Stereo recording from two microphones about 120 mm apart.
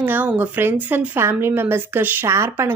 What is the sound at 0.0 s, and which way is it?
A woman's voice, 15° right (ahead or behind).